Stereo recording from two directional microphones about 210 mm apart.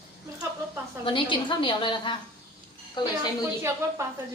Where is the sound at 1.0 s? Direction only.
25° left (ahead or behind).